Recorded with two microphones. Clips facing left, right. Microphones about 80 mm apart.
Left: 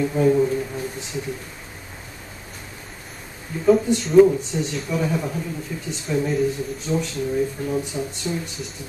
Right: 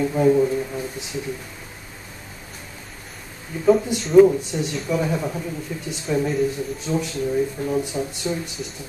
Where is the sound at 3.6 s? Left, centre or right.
Centre.